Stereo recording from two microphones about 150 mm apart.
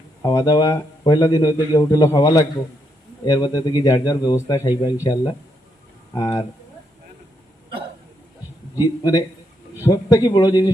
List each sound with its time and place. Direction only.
0.2 s a man's voice: 25° left (ahead or behind)
8.8 s a man's voice: 25° left (ahead or behind)